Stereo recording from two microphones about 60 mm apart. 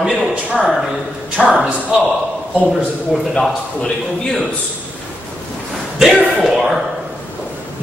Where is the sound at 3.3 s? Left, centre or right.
Centre.